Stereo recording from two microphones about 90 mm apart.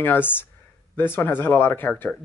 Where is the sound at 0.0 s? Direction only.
20° left (ahead or behind).